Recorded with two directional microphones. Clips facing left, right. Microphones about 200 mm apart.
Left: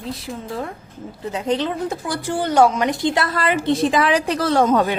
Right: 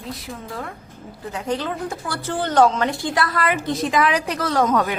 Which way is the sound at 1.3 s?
20° left (ahead or behind).